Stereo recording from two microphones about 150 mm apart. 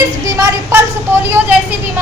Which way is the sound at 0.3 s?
25° right (ahead or behind).